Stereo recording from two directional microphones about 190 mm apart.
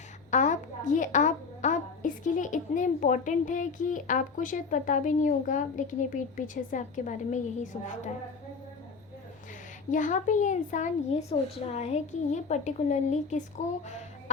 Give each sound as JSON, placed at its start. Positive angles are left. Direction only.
{"t": 0.3, "sound": "a woman's voice", "side_deg": 40}
{"t": 9.9, "sound": "a woman's voice", "side_deg": 40}
{"t": 14.3, "sound": "music", "side_deg": 40}